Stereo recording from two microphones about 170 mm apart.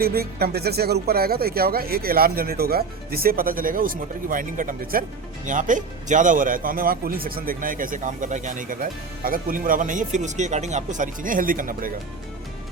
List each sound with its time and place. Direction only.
0.0 s speech: 60° right (ahead or behind)